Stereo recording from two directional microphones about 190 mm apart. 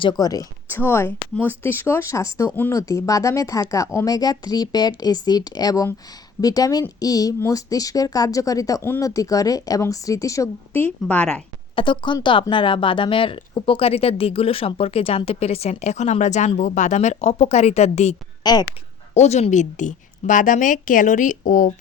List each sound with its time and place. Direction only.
0.0 s a woman's voice: 20° left (ahead or behind)
11.7 s speech: 25° left (ahead or behind)
18.4 s speech: 20° left (ahead or behind)
19.1 s a woman's voice: 35° left (ahead or behind)